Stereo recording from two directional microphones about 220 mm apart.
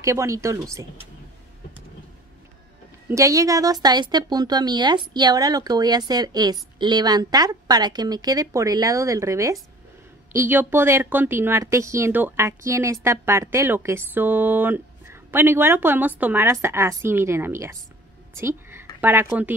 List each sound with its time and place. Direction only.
0.0 s speech: 15° right (ahead or behind)
3.1 s speech: 15° right (ahead or behind)
18.4 s a sound: 10° right (ahead or behind)